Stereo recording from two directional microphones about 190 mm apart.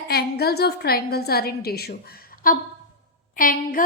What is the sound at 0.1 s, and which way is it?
A woman's voice, 55° left (ahead or behind).